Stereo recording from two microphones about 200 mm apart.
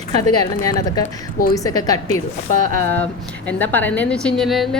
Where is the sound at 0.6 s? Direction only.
20° left (ahead or behind).